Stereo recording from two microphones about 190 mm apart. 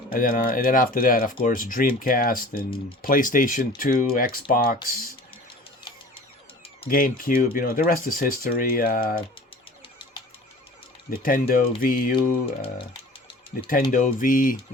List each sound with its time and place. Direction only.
0.1 s speech: 45° left (ahead or behind)
6.8 s speech: 50° left (ahead or behind)
11.1 s speech: 45° left (ahead or behind)
12.6 s a sound: 25° left (ahead or behind)
13.9 s speech: 45° left (ahead or behind)